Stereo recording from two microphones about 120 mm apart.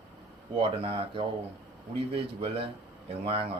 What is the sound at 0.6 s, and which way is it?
Speech, 45° right (ahead or behind).